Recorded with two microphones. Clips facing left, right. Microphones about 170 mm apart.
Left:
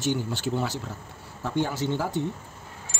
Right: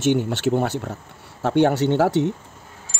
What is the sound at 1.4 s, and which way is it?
Speech, 70° right (ahead or behind).